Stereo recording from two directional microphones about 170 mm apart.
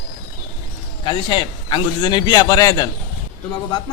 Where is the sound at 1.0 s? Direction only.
25° left (ahead or behind).